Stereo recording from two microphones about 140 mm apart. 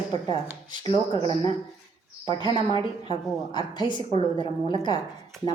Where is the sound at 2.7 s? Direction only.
35° left (ahead or behind).